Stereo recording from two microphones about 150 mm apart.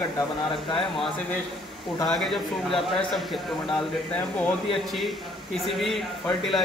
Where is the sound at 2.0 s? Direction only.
Centre (ahead or behind).